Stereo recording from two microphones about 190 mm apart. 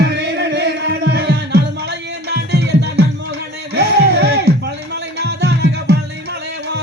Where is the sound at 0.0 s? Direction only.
65° right (ahead or behind).